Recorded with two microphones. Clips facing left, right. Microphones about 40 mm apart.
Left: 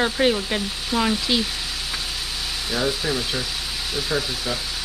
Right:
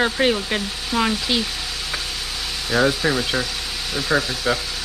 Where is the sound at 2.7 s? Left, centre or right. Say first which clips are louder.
Right 6 dB; centre.